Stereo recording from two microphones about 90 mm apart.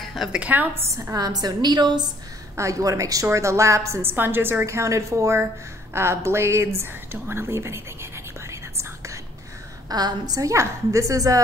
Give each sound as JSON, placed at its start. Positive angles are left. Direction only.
{"t": 0.3, "sound": "a woman's voice", "side_deg": -15}
{"t": 1.1, "sound": "a woman's voice", "side_deg": -45}
{"t": 2.5, "sound": "a woman's voice", "side_deg": -35}
{"t": 9.8, "sound": "a woman's voice", "side_deg": -50}